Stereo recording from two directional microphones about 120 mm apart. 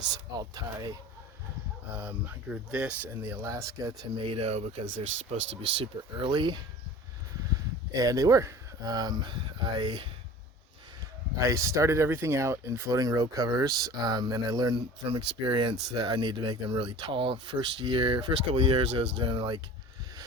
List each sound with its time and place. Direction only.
0.1 s speech: 35° right (ahead or behind)
2.0 s speech: 10° right (ahead or behind)
3.2 s speech: 25° right (ahead or behind)
4.2 s speech: 50° right (ahead or behind)
7.9 s speech: 30° right (ahead or behind)
11.3 s speech: 25° right (ahead or behind); by 19.6 s 40° right (ahead or behind)